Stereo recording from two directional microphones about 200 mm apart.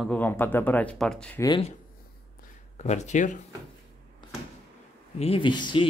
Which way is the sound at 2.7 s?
35° left (ahead or behind).